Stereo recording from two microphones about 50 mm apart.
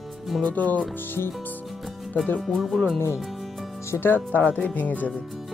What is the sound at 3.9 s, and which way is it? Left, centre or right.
Speech, left.